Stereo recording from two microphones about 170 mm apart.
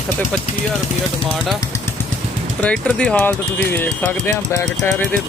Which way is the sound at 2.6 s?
5° left (ahead or behind).